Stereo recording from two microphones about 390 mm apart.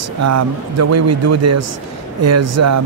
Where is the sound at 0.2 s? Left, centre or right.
Right.